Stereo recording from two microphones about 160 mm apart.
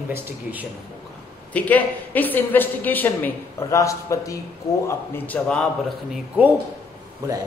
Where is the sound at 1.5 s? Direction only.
10° left (ahead or behind).